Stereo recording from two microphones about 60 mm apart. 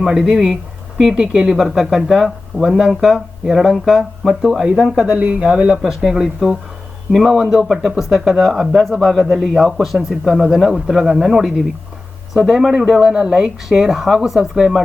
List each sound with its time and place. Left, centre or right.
0.0 s speech: centre
5.0 s speech: right
5.8 s speech: centre